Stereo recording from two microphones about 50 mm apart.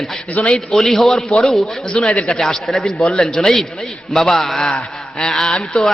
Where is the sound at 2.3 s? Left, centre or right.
Centre.